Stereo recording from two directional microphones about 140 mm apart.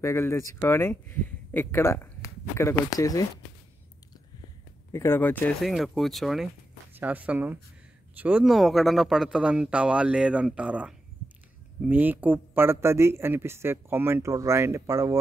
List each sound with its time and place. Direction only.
0.0 s speech: 20° left (ahead or behind)
4.9 s speech: 15° left (ahead or behind)
5.6 s speech: centre (ahead or behind)
7.0 s speech: 10° right (ahead or behind)